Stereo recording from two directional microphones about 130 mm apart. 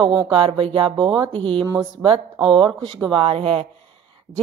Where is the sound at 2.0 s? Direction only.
40° right (ahead or behind).